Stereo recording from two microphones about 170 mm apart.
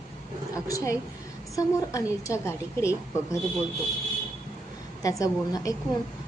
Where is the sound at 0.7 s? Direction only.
20° left (ahead or behind).